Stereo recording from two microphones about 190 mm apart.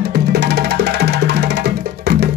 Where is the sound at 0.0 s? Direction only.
60° right (ahead or behind).